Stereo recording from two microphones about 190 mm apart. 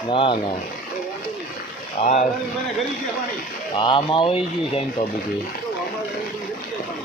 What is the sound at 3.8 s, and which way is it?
Speech, 25° left (ahead or behind).